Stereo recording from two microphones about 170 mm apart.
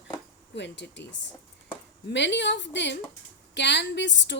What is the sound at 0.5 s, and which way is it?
Speech, 90° left.